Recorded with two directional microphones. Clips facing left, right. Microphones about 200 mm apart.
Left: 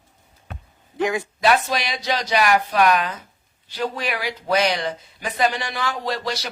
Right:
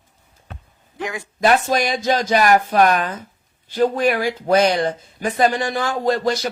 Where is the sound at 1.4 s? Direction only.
50° right (ahead or behind).